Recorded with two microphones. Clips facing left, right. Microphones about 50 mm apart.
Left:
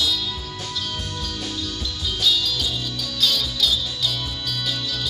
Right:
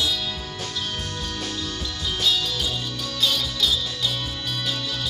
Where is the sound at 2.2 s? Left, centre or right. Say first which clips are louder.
Left 2 dB; right.